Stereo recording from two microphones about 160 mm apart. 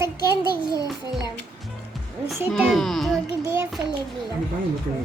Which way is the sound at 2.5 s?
Centre (ahead or behind).